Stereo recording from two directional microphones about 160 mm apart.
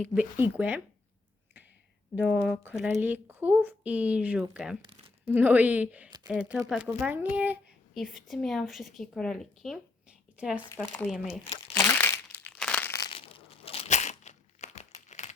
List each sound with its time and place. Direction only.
0.1 s a woman's voice: 10° right (ahead or behind)
2.1 s a woman's voice: 10° right (ahead or behind)
10.3 s speech: 10° right (ahead or behind)
10.9 s speech: 5° left (ahead or behind)
11.5 s crumpling: 20° left (ahead or behind)
13.0 s crumpling: 35° left (ahead or behind)